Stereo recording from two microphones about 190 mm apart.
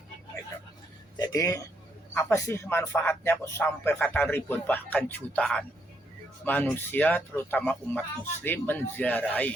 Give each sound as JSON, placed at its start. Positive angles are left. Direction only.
{"t": 1.2, "sound": "speech", "side_deg": 15}